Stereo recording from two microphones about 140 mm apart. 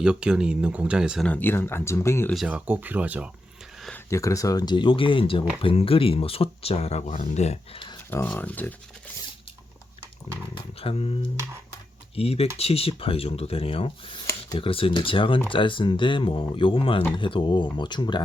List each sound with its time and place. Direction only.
0.0 s speech: 5° right (ahead or behind)
1.3 s speech: 15° left (ahead or behind)
2.3 s speech: 5° right (ahead or behind)
3.9 s speech: 20° left (ahead or behind); by 7.8 s 50° left (ahead or behind)
8.1 s speech: 15° left (ahead or behind)
10.5 s speech: 45° left (ahead or behind)